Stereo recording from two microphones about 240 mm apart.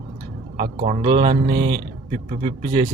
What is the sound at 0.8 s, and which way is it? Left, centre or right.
Speech, right.